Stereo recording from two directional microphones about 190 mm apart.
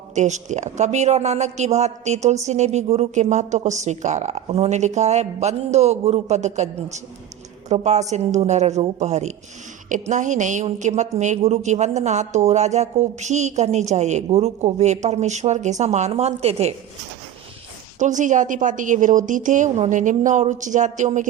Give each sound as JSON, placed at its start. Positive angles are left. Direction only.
{"t": 0.1, "sound": "a woman's voice", "side_deg": -40}
{"t": 18.0, "sound": "a woman's voice", "side_deg": -40}